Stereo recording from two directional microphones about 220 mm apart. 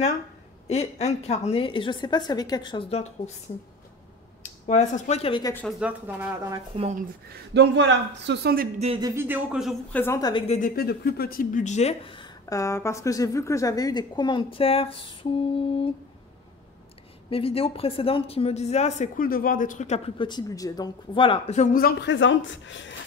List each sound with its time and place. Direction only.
0.7 s speech: 30° left (ahead or behind)
4.4 s speech: 30° left (ahead or behind)
5.5 s a woman's voice: 5° left (ahead or behind)
5.8 s speech: 5° right (ahead or behind)
7.5 s a man's voice: 50° right (ahead or behind)
8.7 s speech: 30° right (ahead or behind)
9.0 s speech: 10° right (ahead or behind)
9.9 s a woman's voice: 10° left (ahead or behind)
10.5 s speech: 40° left (ahead or behind); by 15.9 s 25° left (ahead or behind)
17.3 s speech: 25° left (ahead or behind)
20.2 s speech: 15° left (ahead or behind)
21.8 s speech: 55° left (ahead or behind)